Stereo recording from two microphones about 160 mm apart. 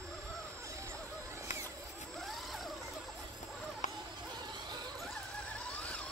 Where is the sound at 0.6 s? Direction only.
20° right (ahead or behind).